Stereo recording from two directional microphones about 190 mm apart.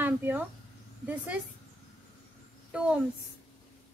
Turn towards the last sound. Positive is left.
turn(degrees=-5)  # may be behind; listen again after turning